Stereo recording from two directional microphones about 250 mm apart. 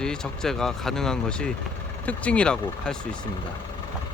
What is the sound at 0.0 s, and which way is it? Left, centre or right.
Speech, centre.